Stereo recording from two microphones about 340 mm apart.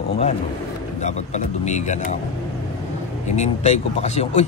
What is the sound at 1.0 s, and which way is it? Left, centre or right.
Speech, centre.